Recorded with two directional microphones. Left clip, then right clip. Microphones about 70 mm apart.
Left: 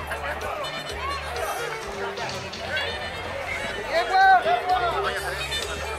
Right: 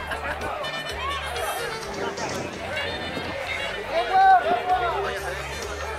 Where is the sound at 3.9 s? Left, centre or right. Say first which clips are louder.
Even; left.